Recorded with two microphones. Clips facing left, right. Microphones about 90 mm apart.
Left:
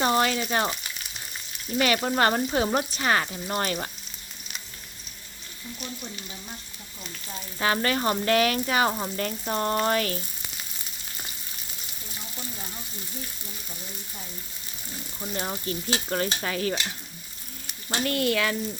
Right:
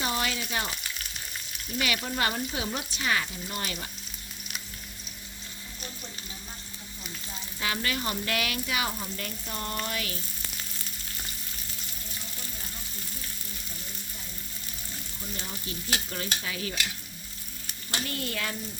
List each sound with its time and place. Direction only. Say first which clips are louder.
0.0 s frying: left 7 dB; 50° left (ahead or behind)
1.8 s frying: left 7 dB; 50° left (ahead or behind)
7.6 s frying: left 7 dB; 40° left (ahead or behind)
15.2 s frying: left 9 dB; 55° left (ahead or behind)
18.0 s speech: left 10 dB; 75° left (ahead or behind); by 18.5 s 90° left